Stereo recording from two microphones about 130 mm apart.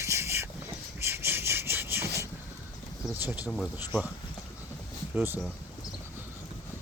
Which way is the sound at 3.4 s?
Centre (ahead or behind).